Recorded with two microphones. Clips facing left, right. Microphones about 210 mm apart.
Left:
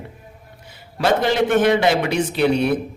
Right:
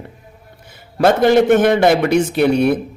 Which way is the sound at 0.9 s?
50° right (ahead or behind).